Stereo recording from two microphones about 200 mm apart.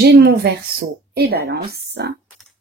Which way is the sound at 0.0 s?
55° right (ahead or behind).